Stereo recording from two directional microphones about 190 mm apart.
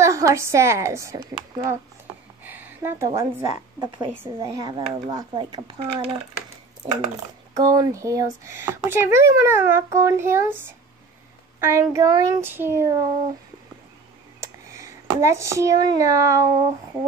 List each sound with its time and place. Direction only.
0.0 s a woman's voice: 15° right (ahead or behind)
7.5 s speech: 20° right (ahead or behind)
11.6 s speech: 15° right (ahead or behind)
14.4 s speech: 15° right (ahead or behind)